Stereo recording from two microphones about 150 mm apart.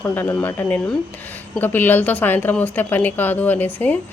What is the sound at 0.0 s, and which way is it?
Speech, 15° left (ahead or behind).